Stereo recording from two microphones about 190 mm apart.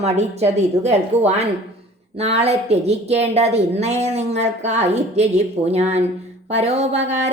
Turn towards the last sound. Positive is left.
turn(degrees=-35)  # may be behind; listen again after turning